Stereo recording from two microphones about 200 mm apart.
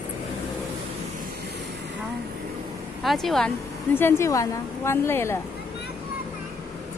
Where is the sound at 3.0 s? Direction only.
Centre (ahead or behind).